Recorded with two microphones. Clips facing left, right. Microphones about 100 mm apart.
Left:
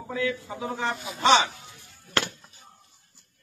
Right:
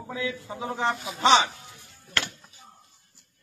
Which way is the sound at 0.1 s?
20° right (ahead or behind).